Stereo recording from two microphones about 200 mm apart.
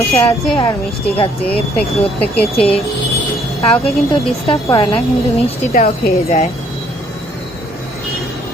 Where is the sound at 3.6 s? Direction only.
30° left (ahead or behind).